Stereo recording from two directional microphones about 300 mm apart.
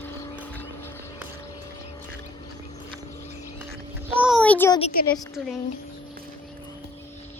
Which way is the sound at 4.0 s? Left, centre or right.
Centre.